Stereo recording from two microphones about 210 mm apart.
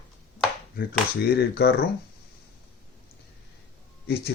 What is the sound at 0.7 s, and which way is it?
Speech, 50° left (ahead or behind).